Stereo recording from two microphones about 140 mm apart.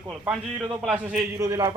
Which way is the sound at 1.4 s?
25° right (ahead or behind).